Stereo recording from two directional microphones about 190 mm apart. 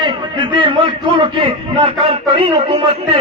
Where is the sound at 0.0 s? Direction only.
25° right (ahead or behind).